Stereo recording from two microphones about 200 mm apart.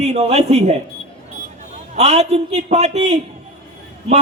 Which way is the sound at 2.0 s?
30° right (ahead or behind).